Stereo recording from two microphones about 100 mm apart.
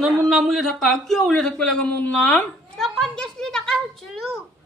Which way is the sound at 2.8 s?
5° left (ahead or behind).